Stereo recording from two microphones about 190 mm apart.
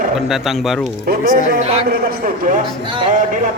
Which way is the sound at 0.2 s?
Centre (ahead or behind).